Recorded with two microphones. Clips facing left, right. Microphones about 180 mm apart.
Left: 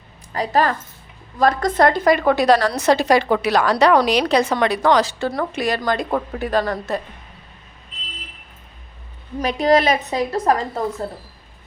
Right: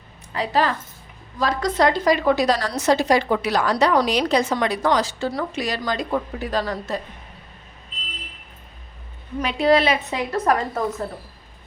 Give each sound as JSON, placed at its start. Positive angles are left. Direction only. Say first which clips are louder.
{"t": 0.3, "sound": "a woman's voice", "louder": "left 2 dB", "side_deg": 45}
{"t": 9.4, "sound": "a woman's voice", "louder": "left 2 dB", "side_deg": 40}